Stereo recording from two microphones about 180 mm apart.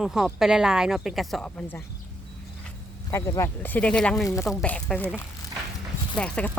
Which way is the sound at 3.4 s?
10° left (ahead or behind).